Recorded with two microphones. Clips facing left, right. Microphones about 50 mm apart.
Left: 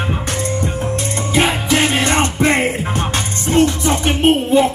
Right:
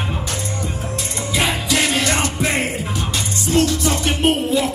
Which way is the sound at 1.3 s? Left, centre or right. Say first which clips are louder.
Left 4 dB; left.